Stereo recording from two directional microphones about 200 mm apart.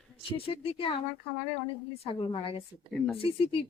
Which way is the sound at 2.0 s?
25° left (ahead or behind).